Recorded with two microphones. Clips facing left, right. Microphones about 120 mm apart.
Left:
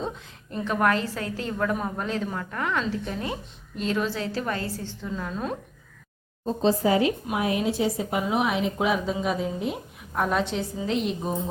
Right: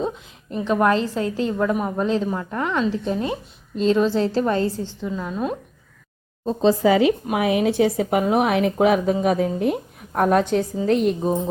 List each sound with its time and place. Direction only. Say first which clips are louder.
0.5 s a woman's voice: right 5 dB; 20° right (ahead or behind)
5.0 s a woman's voice: right 5 dB; 15° right (ahead or behind)
6.8 s speech: right 6 dB; 90° right
7.3 s a woman's voice: right 6 dB; 75° right (ahead or behind)
10.2 s a woman's voice: right 7 dB; 50° right (ahead or behind)